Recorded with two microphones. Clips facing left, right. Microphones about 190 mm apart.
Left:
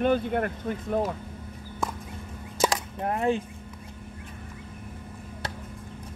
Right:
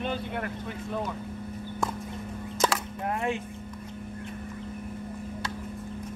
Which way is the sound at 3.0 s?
35° left (ahead or behind).